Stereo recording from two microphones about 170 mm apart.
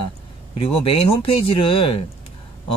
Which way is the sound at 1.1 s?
30° left (ahead or behind).